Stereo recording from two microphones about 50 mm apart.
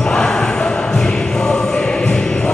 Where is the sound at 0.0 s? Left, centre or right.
Centre.